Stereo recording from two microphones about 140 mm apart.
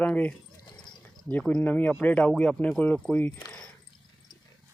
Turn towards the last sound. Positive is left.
turn(degrees=30)  # may be behind; listen again after turning